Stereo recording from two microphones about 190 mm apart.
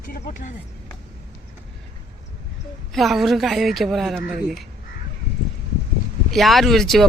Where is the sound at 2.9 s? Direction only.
Centre (ahead or behind).